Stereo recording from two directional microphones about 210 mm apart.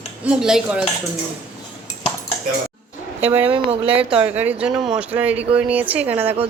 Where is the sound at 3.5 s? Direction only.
25° right (ahead or behind).